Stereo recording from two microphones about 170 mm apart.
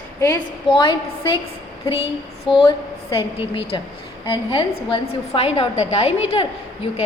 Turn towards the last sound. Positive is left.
turn(degrees=35)  # may be behind; listen again after turning